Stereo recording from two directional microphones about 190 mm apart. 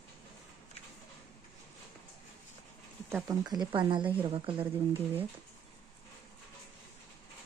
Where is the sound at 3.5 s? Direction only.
25° right (ahead or behind).